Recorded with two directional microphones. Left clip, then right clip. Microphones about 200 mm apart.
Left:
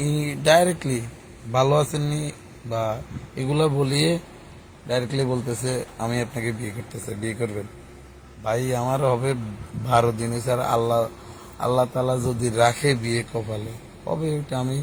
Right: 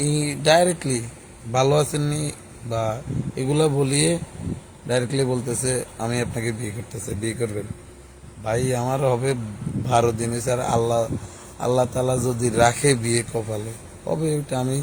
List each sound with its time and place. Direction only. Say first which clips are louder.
0.0 s speech: right 1 dB; 20° right (ahead or behind)